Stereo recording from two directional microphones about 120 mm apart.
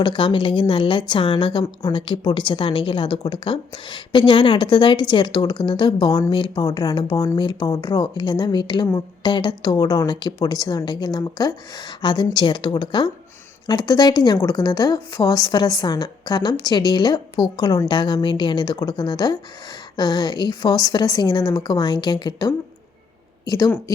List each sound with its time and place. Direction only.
0.0 s a woman's voice: 45° left (ahead or behind)